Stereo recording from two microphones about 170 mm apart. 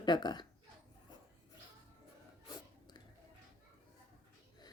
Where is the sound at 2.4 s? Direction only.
25° left (ahead or behind).